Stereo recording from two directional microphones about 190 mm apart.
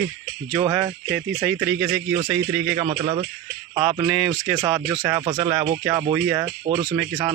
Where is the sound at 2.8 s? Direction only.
25° right (ahead or behind).